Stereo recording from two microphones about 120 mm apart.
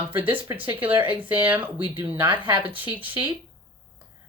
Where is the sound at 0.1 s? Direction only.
15° right (ahead or behind).